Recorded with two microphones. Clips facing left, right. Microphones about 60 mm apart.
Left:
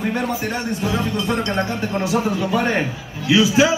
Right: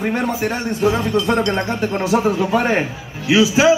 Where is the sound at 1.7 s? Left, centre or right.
Right.